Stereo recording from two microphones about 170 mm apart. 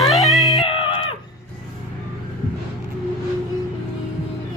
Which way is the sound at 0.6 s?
30° left (ahead or behind).